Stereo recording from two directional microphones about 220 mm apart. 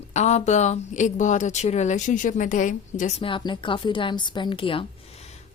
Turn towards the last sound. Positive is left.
turn(degrees=25)  # may be behind; listen again after turning